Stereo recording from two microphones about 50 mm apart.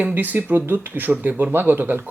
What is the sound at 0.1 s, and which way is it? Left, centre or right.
A man's voice, right.